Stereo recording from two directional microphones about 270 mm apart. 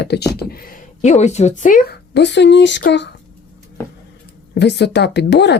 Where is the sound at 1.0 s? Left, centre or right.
Left.